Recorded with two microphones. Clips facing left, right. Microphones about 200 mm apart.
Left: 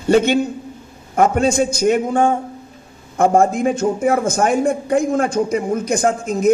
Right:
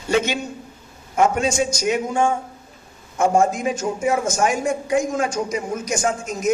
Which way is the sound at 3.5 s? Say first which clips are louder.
Left 6 dB; 55° left (ahead or behind).